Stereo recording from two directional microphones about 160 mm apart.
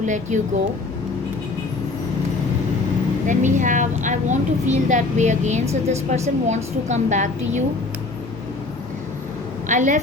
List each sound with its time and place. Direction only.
0.0 s a woman's voice: 50° right (ahead or behind)
3.2 s a woman's voice: 50° right (ahead or behind)
9.6 s a woman's voice: 50° right (ahead or behind)